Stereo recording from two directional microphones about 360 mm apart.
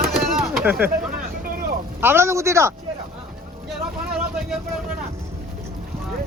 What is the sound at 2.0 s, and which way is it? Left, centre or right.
Speech, centre.